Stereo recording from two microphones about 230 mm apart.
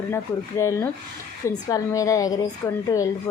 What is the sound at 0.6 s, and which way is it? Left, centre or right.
A woman's voice, centre.